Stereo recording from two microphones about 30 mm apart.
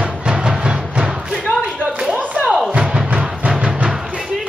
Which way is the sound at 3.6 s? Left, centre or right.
Right.